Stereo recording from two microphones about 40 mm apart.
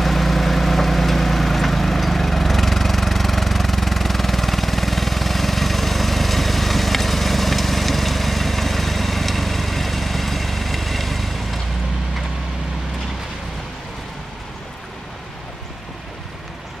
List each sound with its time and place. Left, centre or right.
0.0 s vehicle: centre